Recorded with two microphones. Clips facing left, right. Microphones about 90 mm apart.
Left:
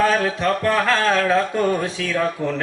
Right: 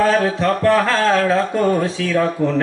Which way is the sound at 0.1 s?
20° right (ahead or behind).